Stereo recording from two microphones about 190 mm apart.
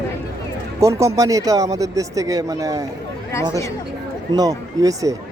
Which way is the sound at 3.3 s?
15° left (ahead or behind).